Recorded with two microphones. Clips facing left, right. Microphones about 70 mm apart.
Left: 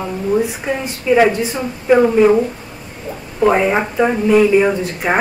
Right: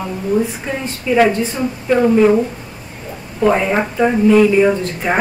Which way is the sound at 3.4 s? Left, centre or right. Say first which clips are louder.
Left 1 dB; centre.